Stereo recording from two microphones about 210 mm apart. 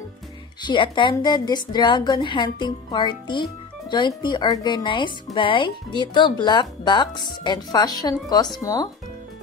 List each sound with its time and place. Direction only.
0.6 s speech: 20° left (ahead or behind)